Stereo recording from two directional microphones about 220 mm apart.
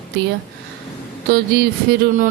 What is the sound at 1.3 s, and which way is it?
Speech, 45° right (ahead or behind).